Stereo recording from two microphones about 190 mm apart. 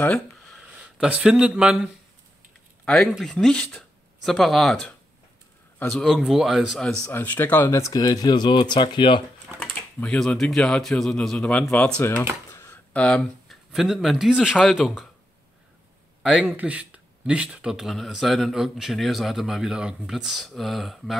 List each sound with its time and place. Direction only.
0.9 s speech: 5° right (ahead or behind)
7.1 s speech: 10° left (ahead or behind)
9.6 s speech: 5° left (ahead or behind)
16.2 s speech: 5° right (ahead or behind)